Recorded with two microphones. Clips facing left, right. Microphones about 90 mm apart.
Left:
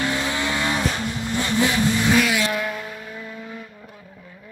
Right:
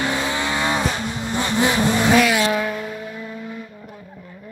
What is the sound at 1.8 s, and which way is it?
Vehicle, 45° right (ahead or behind).